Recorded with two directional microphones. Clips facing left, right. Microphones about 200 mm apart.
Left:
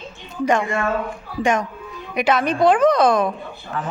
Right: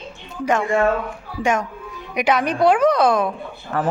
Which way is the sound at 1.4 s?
10° right (ahead or behind).